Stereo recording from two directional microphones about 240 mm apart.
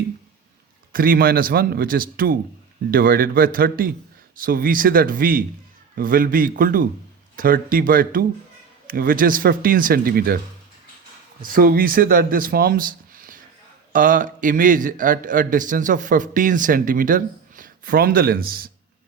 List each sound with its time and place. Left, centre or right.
0.9 s a man's voice: right
11.4 s a man's voice: right